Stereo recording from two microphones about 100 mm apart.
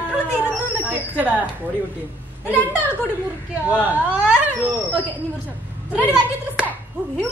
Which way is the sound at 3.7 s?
15° right (ahead or behind).